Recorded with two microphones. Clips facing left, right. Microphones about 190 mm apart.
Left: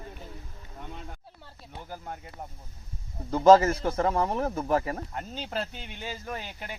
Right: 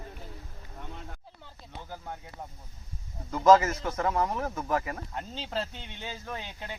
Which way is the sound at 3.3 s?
30° left (ahead or behind).